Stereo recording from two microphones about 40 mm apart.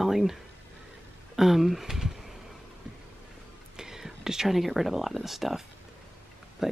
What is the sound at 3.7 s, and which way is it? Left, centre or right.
Speech, centre.